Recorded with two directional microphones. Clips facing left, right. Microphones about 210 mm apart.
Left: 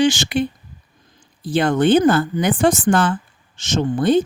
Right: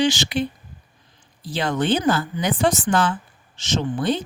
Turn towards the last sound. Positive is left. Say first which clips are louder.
# left 6 dB
turn(degrees=50)  # may be behind; listen again after turning